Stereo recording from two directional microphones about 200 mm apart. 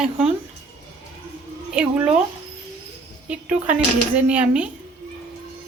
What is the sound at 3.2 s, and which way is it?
Speech, 5° right (ahead or behind).